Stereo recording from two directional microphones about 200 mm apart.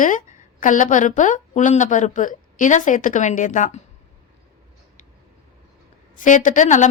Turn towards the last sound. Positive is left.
turn(degrees=40)  # may be behind; listen again after turning